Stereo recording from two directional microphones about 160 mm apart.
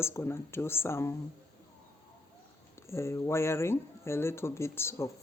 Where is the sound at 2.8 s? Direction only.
15° left (ahead or behind).